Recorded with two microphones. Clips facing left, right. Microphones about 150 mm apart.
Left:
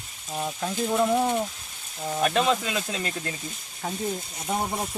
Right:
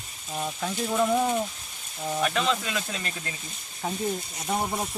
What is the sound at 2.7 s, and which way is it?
Speech, 20° left (ahead or behind).